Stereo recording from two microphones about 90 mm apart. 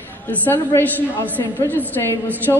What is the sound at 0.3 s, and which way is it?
A woman's voice, 20° left (ahead or behind).